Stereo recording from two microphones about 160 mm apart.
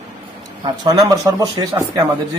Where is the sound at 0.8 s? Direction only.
25° right (ahead or behind).